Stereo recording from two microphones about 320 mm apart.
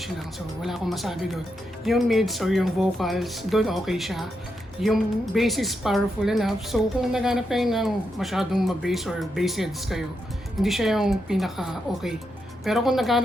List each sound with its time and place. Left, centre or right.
0.6 s a woman's voice: centre